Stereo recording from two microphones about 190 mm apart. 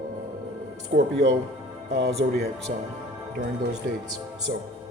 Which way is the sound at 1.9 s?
60° right (ahead or behind).